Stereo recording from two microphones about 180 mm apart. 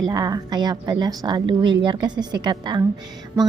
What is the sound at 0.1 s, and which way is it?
A woman's voice, 20° right (ahead or behind).